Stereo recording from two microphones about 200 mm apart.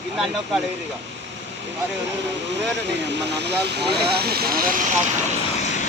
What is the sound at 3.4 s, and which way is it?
Speech, 55° right (ahead or behind).